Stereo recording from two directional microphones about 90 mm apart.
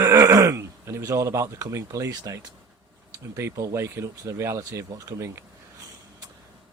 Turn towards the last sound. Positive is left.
turn(degrees=-35)  # may be behind; listen again after turning